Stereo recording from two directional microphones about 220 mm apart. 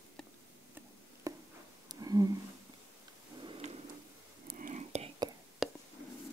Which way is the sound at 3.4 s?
25° right (ahead or behind).